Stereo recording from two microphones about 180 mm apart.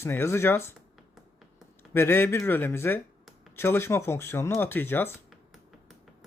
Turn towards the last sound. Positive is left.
turn(degrees=10)  # may be behind; listen again after turning